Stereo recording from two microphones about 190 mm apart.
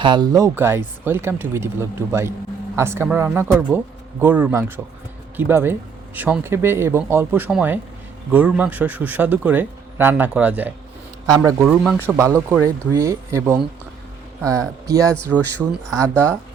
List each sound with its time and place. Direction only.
0.0 s speech: 25° right (ahead or behind); by 11.9 s centre (ahead or behind)
11.9 s speech: 15° right (ahead or behind)
14.8 s speech: 15° right (ahead or behind)
15.1 s speech: 10° left (ahead or behind)